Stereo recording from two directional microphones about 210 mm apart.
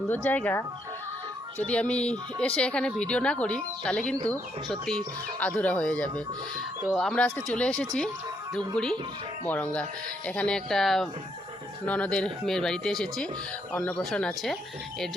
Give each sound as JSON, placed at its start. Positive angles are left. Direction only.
{"t": 0.1, "sound": "speech", "side_deg": 10}
{"t": 1.6, "sound": "speech", "side_deg": 5}